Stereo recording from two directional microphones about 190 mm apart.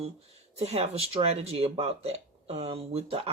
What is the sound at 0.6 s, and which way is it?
Speech, 35° right (ahead or behind).